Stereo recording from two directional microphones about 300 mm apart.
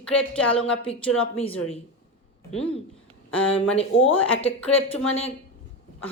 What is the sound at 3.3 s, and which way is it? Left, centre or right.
Speech, centre.